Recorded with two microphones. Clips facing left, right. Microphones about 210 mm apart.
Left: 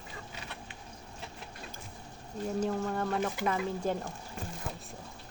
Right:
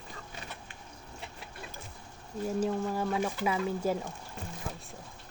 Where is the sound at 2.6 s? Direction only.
5° right (ahead or behind).